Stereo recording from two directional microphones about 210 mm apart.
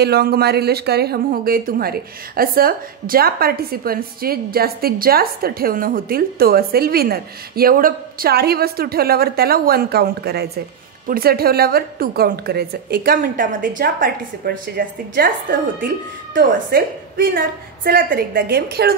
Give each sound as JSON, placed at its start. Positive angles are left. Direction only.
{"t": 0.0, "sound": "speech", "side_deg": -45}
{"t": 16.3, "sound": "speech", "side_deg": -40}